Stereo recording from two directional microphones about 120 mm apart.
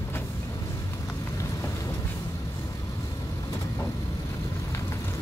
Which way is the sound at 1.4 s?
25° left (ahead or behind).